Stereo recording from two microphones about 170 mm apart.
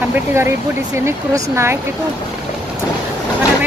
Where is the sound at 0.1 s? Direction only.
15° right (ahead or behind).